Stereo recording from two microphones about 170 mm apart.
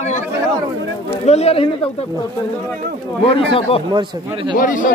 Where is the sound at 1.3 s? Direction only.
40° left (ahead or behind).